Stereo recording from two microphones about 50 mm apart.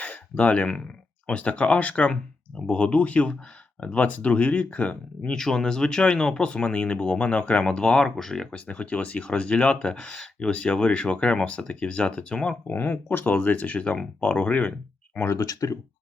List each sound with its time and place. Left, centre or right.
0.0 s a sound: left
1.3 s speech: left
5.3 s speech: centre
8.0 s speech: centre
8.5 s speech: left
12.6 s speech: left
15.3 s speech: left